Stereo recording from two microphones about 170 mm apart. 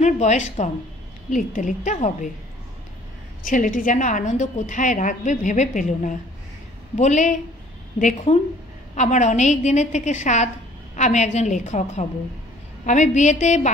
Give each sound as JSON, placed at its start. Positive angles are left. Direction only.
{"t": 0.0, "sound": "a woman's voice", "side_deg": 45}
{"t": 3.4, "sound": "a woman's voice", "side_deg": 50}